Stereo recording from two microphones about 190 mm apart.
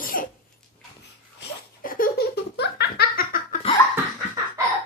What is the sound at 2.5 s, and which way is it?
Laughter, 60° left (ahead or behind).